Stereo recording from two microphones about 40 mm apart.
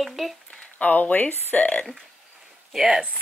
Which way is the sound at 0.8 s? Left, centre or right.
Left.